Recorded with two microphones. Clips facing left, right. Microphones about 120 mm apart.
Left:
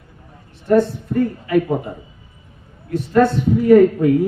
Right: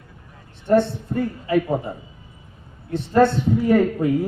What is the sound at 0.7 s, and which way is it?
Speech, 30° right (ahead or behind).